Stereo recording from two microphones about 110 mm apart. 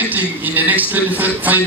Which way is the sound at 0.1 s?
15° right (ahead or behind).